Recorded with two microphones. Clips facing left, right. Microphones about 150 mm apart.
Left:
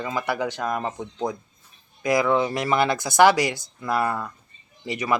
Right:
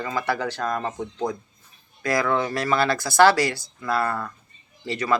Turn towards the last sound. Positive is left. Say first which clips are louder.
# right 1 dB
turn(degrees=15)  # may be behind; listen again after turning